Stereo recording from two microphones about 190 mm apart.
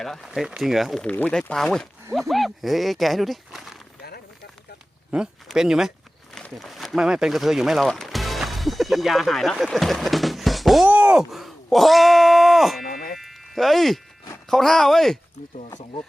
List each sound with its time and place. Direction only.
0.0 s speech: centre (ahead or behind)
5.1 s speech: 5° right (ahead or behind)
12.9 s a sound: 50° left (ahead or behind)
13.1 s music: centre (ahead or behind)
14.5 s speech: centre (ahead or behind)